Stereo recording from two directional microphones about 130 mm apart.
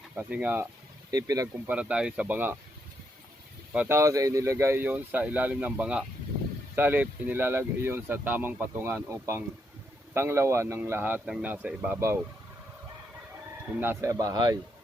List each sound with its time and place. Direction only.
0.2 s speech: 10° right (ahead or behind)
1.1 s a man's voice: 30° right (ahead or behind)
1.5 s speech: 10° right (ahead or behind)
3.7 s a man's voice: 15° right (ahead or behind)
13.7 s a man's voice: 15° right (ahead or behind); by 14.6 s 30° right (ahead or behind)